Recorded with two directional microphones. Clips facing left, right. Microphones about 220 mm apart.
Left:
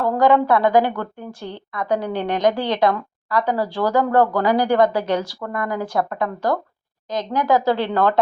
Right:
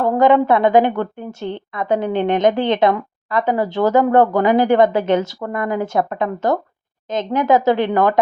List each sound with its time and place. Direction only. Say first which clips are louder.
0.0 s a woman's voice: right 3 dB; 20° right (ahead or behind)